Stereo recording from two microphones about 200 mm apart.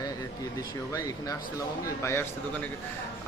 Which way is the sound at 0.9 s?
15° left (ahead or behind).